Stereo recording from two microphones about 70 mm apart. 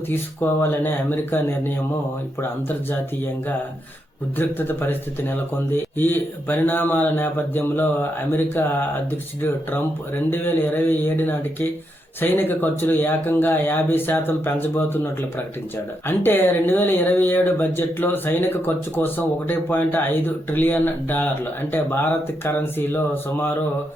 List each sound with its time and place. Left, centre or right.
0.6 s speech: left
4.4 s speech: left
10.2 s speech: left
16.0 s speech: left